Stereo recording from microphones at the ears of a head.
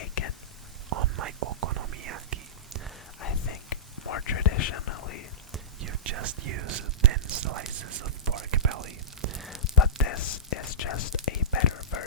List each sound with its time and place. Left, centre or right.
0.0 s whispering: left
0.9 s whispering: right
3.2 s whispering: left
5.8 s whispering: right
9.6 s whispering: left